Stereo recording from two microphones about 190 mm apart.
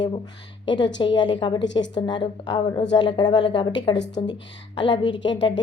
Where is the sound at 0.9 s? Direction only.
25° left (ahead or behind).